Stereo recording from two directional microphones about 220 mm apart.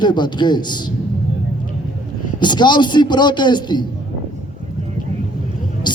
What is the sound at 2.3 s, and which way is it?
A man's voice, 20° left (ahead or behind).